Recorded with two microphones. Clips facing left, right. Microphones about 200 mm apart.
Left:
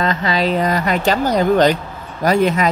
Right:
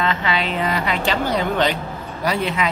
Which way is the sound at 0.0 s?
40° left (ahead or behind).